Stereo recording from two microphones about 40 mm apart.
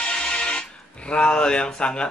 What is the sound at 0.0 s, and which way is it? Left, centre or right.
Speech, left.